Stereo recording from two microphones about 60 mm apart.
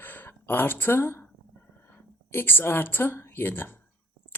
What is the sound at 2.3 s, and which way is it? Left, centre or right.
Speech, left.